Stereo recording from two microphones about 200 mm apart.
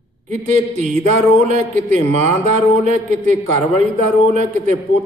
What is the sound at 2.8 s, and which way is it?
Speech, 35° right (ahead or behind).